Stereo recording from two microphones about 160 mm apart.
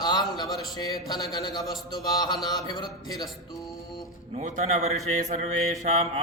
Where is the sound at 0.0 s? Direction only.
25° left (ahead or behind).